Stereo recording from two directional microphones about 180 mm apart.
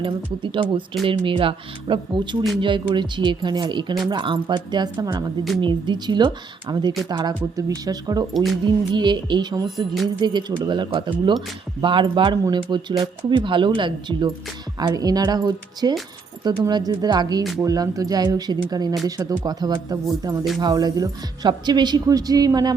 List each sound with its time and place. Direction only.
0.0 s speech: 25° right (ahead or behind)